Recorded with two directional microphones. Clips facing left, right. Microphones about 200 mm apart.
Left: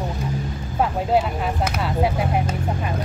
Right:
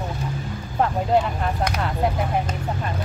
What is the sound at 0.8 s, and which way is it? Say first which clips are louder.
Speech: even; 5° left (ahead or behind).